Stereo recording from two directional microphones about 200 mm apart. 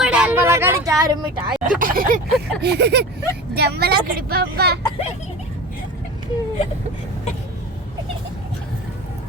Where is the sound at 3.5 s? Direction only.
55° right (ahead or behind).